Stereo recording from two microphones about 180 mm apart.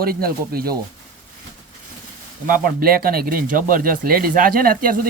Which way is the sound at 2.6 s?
55° right (ahead or behind).